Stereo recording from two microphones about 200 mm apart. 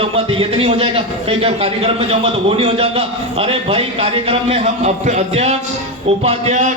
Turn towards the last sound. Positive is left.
turn(degrees=-35)  # may be behind; listen again after turning